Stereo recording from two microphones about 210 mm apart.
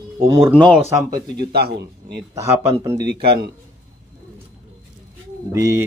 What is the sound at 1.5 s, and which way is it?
Speech, 50° right (ahead or behind).